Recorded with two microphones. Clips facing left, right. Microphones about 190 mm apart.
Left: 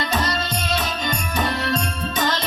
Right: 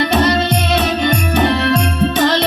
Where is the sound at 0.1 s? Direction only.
70° right (ahead or behind).